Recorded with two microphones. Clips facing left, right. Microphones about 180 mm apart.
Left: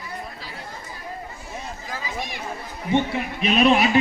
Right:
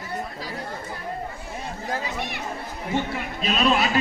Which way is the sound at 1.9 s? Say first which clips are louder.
Right 3 dB; 60° right (ahead or behind).